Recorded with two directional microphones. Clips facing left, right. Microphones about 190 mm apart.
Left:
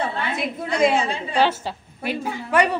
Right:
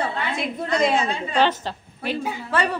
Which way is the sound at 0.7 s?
10° left (ahead or behind).